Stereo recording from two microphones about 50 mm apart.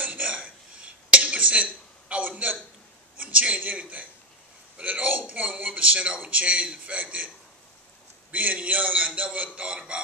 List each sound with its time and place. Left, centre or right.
0.0 s a sound: right
3.2 s a man's voice: right
8.3 s a man's voice: right